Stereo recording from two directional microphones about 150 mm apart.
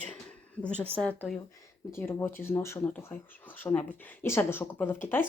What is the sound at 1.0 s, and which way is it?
Speech, 10° left (ahead or behind).